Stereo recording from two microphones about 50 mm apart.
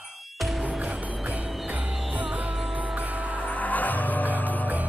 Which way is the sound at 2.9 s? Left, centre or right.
Right.